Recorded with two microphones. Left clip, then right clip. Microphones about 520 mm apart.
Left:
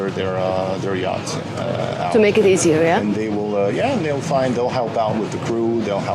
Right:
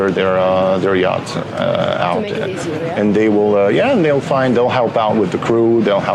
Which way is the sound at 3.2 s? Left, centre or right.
Right.